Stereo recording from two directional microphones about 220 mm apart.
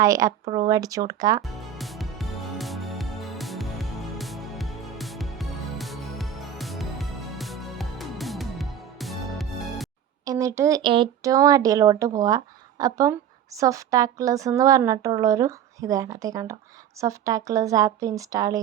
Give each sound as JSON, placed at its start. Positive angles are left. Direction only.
{"t": 0.0, "sound": "speech", "side_deg": -15}
{"t": 1.8, "sound": "music", "side_deg": 0}
{"t": 10.2, "sound": "speech", "side_deg": -15}